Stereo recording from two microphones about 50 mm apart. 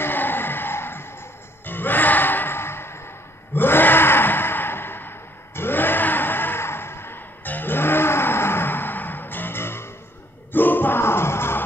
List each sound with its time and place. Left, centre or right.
0.0 s a sound: left
1.7 s music: left
3.5 s gasp: left
7.4 s music: left